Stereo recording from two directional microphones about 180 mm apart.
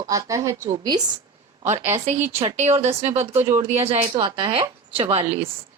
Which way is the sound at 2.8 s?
35° right (ahead or behind).